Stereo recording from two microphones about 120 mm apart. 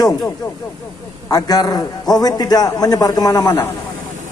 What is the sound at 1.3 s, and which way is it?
A man's voice, 30° left (ahead or behind).